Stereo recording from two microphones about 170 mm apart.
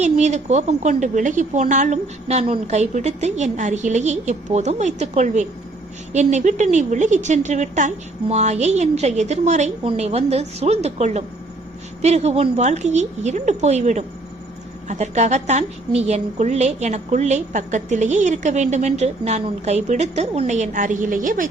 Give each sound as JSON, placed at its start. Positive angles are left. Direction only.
{"t": 0.0, "sound": "a woman's voice", "side_deg": -45}